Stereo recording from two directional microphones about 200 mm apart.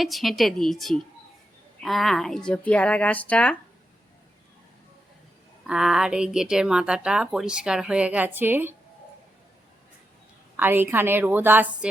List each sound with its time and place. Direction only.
0.0 s speech: centre (ahead or behind)
5.6 s speech: centre (ahead or behind)
10.6 s a woman's voice: 10° right (ahead or behind)